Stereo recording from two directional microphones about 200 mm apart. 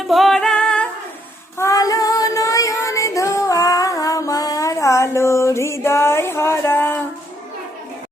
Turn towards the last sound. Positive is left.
turn(degrees=10)  # may be behind; listen again after turning